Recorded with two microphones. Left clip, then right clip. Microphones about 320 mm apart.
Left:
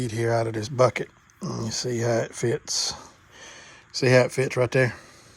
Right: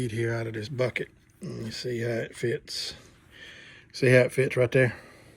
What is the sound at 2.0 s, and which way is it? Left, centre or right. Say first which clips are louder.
Speech: left 8 dB; left.